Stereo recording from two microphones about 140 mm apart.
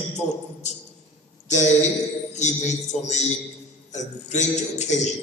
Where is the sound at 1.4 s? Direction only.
55° left (ahead or behind).